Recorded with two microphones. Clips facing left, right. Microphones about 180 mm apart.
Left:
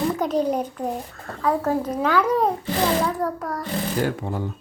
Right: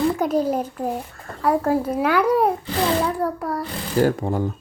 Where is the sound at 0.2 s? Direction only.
10° right (ahead or behind).